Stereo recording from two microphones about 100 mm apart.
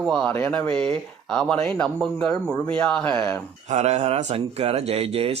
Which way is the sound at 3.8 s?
90° right.